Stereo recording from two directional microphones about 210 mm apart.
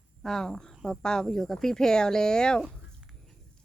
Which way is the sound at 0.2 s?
Centre (ahead or behind).